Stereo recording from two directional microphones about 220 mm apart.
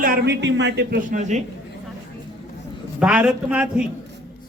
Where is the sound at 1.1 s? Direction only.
35° right (ahead or behind).